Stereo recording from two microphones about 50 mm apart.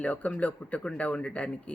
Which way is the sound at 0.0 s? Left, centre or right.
Left.